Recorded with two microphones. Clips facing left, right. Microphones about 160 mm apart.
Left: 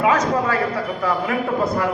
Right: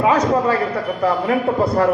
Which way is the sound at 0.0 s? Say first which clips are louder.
Right 3 dB; 30° right (ahead or behind).